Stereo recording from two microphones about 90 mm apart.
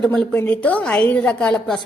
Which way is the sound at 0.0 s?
10° left (ahead or behind).